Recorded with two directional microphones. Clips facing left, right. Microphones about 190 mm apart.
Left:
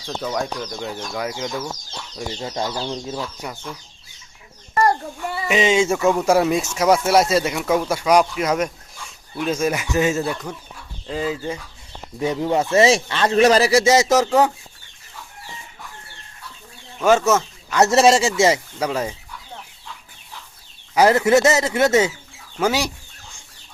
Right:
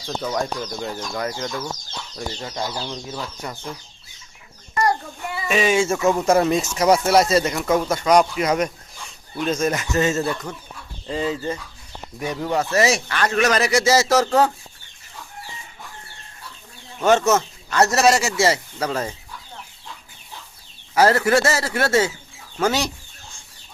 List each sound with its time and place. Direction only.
0.2 s speech: centre (ahead or behind)
2.4 s speech: 20° left (ahead or behind)
5.5 s speech: 20° left (ahead or behind)
6.2 s speech: 5° left (ahead or behind)
12.2 s speech: 25° left (ahead or behind)
13.9 s speech: 20° left (ahead or behind)
17.0 s speech: 5° left (ahead or behind)
17.7 s speech: 20° left (ahead or behind)
20.9 s speech: 15° left (ahead or behind)